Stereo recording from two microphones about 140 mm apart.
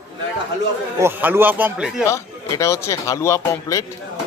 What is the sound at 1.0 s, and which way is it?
Speech, 15° right (ahead or behind).